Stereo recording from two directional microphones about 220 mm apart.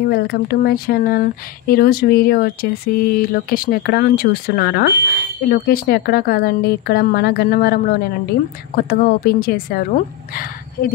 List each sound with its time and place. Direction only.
0.1 s speech: 45° left (ahead or behind)